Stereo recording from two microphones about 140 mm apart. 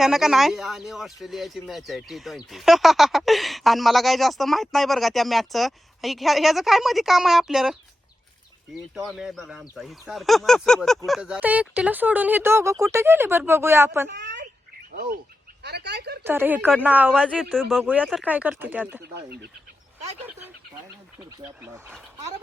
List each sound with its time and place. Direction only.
0.0 s speech: 5° right (ahead or behind)
9.0 s speech: 5° right (ahead or behind)
14.9 s speech: 90° right
16.2 s speech: 15° right (ahead or behind)
17.7 s speech: centre (ahead or behind)
18.2 s speech: 10° right (ahead or behind)